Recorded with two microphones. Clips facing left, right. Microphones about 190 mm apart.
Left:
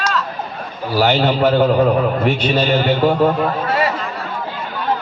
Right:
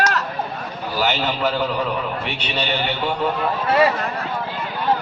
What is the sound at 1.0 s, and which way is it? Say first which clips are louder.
A man's voice: left 7 dB; 45° left (ahead or behind).